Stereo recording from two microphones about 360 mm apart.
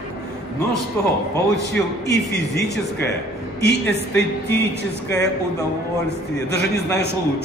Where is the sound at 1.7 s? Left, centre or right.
Left.